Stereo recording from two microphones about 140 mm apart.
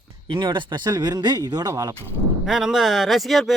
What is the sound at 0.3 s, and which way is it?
Speech, 35° right (ahead or behind).